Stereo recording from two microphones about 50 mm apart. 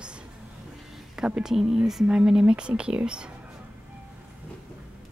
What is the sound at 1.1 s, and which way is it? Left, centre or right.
Speech, centre.